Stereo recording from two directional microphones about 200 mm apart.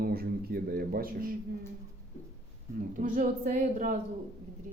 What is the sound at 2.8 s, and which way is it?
A man's voice, 40° right (ahead or behind).